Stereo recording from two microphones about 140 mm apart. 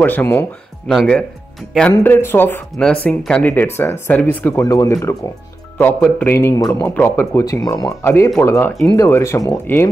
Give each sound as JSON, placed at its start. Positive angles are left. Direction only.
{"t": 0.0, "sound": "speech", "side_deg": 15}
{"t": 0.8, "sound": "speech", "side_deg": 5}
{"t": 2.0, "sound": "speech", "side_deg": 15}